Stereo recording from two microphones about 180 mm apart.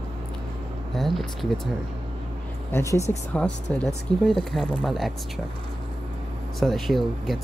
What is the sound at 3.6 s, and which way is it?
Speech, 5° left (ahead or behind).